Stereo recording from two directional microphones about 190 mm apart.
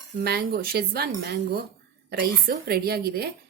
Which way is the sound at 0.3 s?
55° right (ahead or behind).